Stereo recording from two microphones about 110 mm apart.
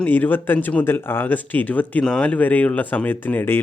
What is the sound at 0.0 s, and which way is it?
Speech, 15° left (ahead or behind).